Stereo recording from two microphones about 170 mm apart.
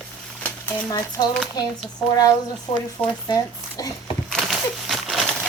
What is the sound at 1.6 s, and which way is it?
Speech, 25° left (ahead or behind).